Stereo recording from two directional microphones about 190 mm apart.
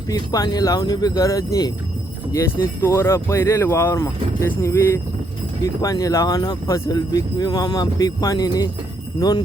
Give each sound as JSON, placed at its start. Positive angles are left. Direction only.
{"t": 0.1, "sound": "speech", "side_deg": 20}
{"t": 2.8, "sound": "speech", "side_deg": 15}